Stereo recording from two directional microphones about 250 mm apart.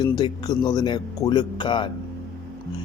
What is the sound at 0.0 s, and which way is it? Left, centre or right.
Speech, centre.